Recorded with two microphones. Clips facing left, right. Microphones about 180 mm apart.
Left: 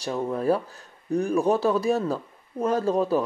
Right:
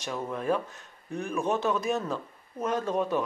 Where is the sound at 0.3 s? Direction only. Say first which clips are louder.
Left 4 dB; 35° left (ahead or behind).